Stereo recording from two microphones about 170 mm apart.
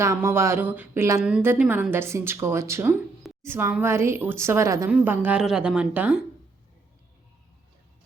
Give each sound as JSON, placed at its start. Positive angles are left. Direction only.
{"t": 0.0, "sound": "a woman's voice", "side_deg": -15}